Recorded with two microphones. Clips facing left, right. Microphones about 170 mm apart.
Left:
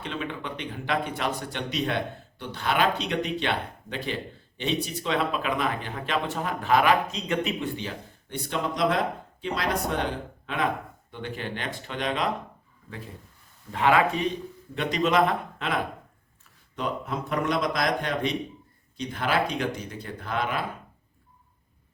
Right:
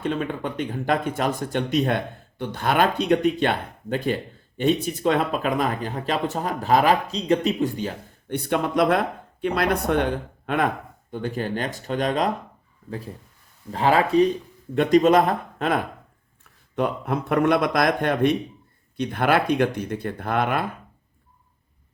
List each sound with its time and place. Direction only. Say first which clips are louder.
0.0 s speech: right 7 dB; 45° right (ahead or behind)
11.1 s speech: right 7 dB; 40° right (ahead or behind)
13.7 s speech: right 2 dB; 35° right (ahead or behind)
14.8 s speech: right 7 dB; 45° right (ahead or behind)
16.7 s speech: right 6 dB; 60° right (ahead or behind)